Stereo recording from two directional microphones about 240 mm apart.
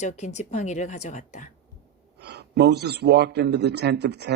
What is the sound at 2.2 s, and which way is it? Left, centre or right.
A man's voice, right.